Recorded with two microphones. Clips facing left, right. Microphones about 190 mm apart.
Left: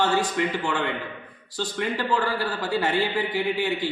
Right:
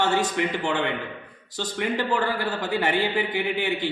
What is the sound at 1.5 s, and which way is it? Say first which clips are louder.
Speech: right 1 dB; 20° right (ahead or behind).